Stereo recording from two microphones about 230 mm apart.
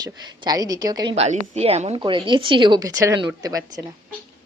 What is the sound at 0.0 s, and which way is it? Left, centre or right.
A woman's voice, centre.